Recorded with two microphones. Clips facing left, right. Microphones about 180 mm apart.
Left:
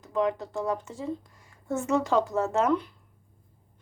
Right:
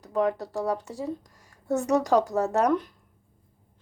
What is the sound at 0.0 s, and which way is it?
Speech, 40° right (ahead or behind).